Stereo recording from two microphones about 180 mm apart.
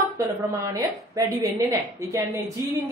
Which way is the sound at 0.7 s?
20° right (ahead or behind).